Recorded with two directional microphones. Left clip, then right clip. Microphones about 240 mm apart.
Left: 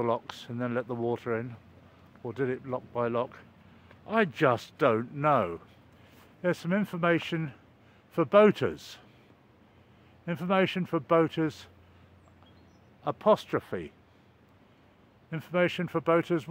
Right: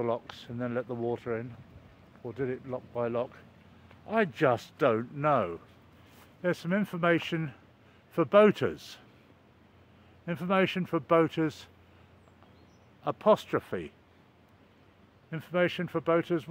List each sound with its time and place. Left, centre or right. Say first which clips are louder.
0.0 s speech: left 2 dB; centre
10.2 s speech: left 1 dB; centre
13.0 s speech: even; centre
15.2 s speech: left 1 dB; centre